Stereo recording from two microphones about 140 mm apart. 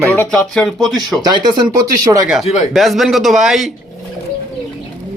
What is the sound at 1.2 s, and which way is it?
Speech, 30° right (ahead or behind).